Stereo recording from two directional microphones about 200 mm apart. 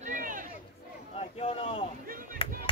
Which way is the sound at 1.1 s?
30° left (ahead or behind).